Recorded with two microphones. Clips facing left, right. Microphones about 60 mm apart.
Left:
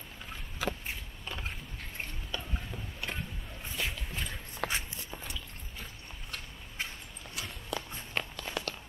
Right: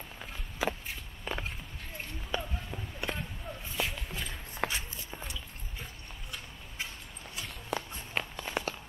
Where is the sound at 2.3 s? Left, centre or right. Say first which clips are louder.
Right 8 dB; centre.